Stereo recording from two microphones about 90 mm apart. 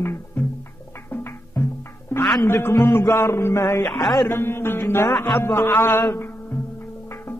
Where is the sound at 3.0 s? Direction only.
35° left (ahead or behind).